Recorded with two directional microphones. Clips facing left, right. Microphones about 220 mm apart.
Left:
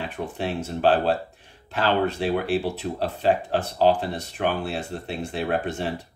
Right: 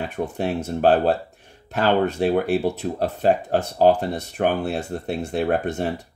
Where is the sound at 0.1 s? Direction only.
45° right (ahead or behind).